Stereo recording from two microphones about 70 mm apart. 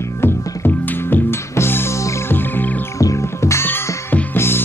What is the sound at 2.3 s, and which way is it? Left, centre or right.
Music, left.